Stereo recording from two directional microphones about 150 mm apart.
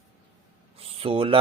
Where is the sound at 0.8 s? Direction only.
40° right (ahead or behind).